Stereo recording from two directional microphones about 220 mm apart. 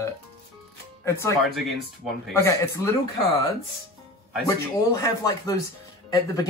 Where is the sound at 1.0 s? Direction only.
10° left (ahead or behind).